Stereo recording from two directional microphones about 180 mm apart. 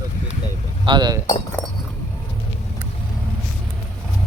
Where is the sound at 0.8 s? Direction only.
25° right (ahead or behind).